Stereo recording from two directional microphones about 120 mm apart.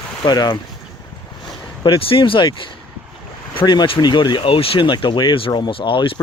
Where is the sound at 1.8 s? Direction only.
50° left (ahead or behind).